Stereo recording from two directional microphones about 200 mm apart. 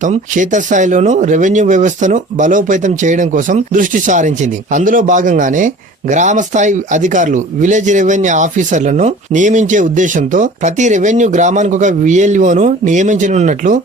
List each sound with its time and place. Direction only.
0.0 s speech: 40° right (ahead or behind)